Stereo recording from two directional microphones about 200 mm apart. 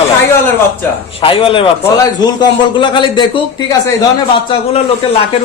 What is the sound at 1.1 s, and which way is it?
A woman's voice, 25° left (ahead or behind).